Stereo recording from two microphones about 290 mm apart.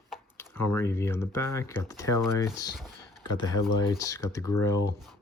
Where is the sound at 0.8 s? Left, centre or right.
Centre.